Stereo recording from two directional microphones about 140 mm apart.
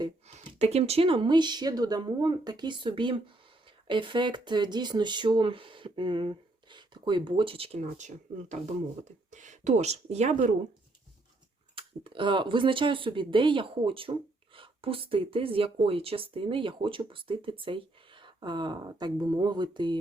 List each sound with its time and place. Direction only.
0.3 s speech: 50° right (ahead or behind)
7.8 s speech: 60° right (ahead or behind)
11.7 s speech: 40° right (ahead or behind)